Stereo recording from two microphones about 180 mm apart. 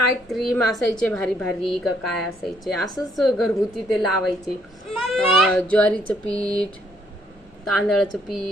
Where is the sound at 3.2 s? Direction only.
Centre (ahead or behind).